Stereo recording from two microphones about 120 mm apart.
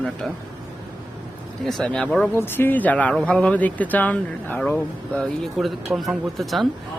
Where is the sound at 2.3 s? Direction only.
20° left (ahead or behind).